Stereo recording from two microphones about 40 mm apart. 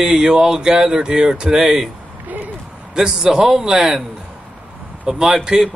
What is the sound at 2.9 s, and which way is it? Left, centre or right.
Speech, centre.